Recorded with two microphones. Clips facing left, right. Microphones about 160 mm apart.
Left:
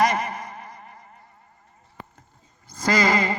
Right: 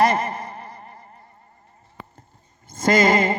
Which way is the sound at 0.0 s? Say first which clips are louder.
Right 3 dB; 30° right (ahead or behind).